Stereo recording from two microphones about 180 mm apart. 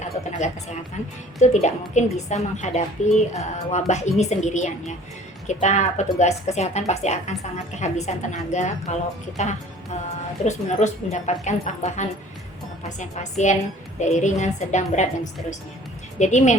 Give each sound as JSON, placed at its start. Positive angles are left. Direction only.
{"t": 0.0, "sound": "a sound", "side_deg": 40}
{"t": 1.4, "sound": "speech", "side_deg": 40}
{"t": 10.4, "sound": "speech", "side_deg": 40}